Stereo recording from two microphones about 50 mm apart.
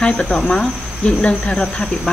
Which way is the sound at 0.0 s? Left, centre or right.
Centre.